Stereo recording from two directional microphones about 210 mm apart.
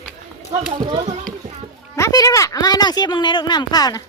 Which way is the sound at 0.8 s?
20° right (ahead or behind).